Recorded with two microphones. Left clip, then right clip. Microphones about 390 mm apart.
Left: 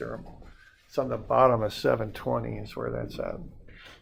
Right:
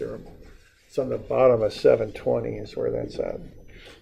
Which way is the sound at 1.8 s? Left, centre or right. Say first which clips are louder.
Right 7 dB; left.